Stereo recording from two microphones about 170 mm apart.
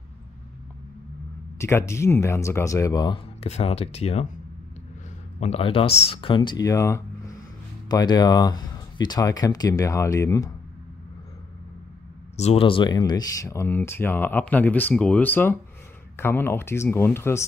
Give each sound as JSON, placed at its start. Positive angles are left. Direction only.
{"t": 1.6, "sound": "speech", "side_deg": 15}
{"t": 3.4, "sound": "speech", "side_deg": 40}
{"t": 5.4, "sound": "speech", "side_deg": 35}
{"t": 12.4, "sound": "speech", "side_deg": 35}